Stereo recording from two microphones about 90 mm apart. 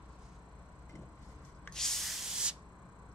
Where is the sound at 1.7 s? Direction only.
5° left (ahead or behind).